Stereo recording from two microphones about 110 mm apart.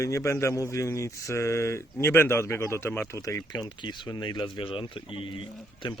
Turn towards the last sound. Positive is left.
turn(degrees=50)  # may be behind; listen again after turning